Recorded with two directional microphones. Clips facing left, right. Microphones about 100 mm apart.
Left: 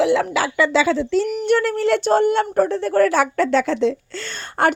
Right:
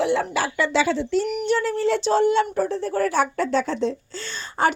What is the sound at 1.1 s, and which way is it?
Speech, 65° left (ahead or behind).